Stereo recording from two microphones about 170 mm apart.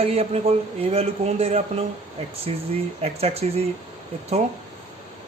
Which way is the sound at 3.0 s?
35° right (ahead or behind).